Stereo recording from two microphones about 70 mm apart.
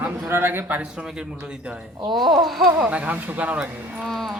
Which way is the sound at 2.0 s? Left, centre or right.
Right.